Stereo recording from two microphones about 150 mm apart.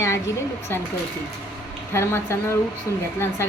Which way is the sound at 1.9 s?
15° left (ahead or behind).